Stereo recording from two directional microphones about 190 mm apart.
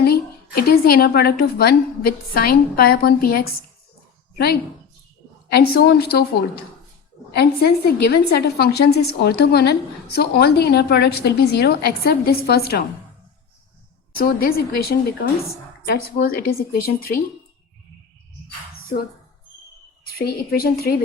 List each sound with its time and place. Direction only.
0.7 s a woman's voice: 55° left (ahead or behind)
5.5 s a woman's voice: 55° left (ahead or behind)
7.3 s a woman's voice: 55° left (ahead or behind)
14.2 s a woman's voice: 50° left (ahead or behind)
20.1 s a woman's voice: 55° left (ahead or behind)